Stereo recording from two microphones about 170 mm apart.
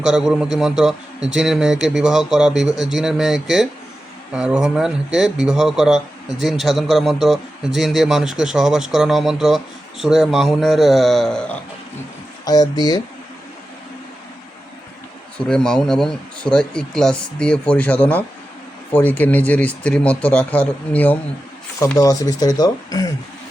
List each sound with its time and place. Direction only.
0.0 s speech: 5° right (ahead or behind)
12.5 s speech: 25° left (ahead or behind)
15.4 s speech: 5° left (ahead or behind); by 23.0 s 20° left (ahead or behind)